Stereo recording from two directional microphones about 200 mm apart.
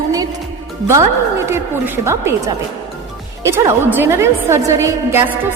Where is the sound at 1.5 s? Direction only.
15° right (ahead or behind).